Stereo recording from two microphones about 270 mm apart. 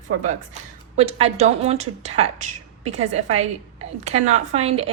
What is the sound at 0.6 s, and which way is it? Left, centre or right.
Speech, right.